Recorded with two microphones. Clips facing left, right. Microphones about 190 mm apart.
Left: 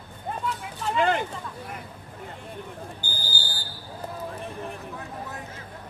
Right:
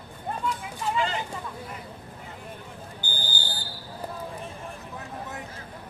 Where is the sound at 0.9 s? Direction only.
60° left (ahead or behind).